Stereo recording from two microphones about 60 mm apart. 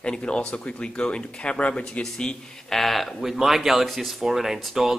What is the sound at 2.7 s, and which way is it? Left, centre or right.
Speech, centre.